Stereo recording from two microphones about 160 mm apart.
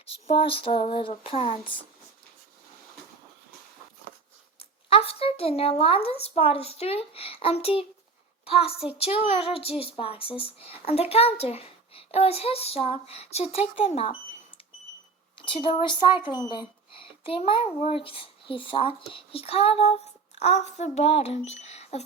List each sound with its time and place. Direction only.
0.0 s speech: 35° left (ahead or behind)
4.9 s speech: 35° left (ahead or behind)
15.4 s speech: 30° left (ahead or behind)